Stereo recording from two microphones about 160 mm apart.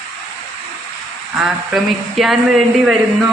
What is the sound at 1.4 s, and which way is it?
A woman's voice, centre (ahead or behind).